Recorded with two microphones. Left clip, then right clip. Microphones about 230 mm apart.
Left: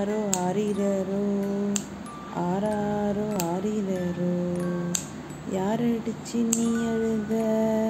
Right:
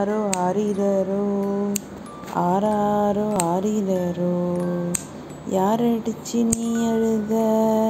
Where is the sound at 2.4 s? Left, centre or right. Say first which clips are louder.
Right 7 dB; centre.